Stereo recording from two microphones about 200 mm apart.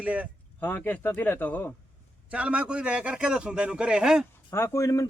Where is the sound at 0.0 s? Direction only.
5° right (ahead or behind).